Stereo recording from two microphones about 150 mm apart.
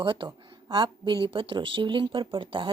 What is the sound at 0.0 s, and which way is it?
Speech, 35° right (ahead or behind).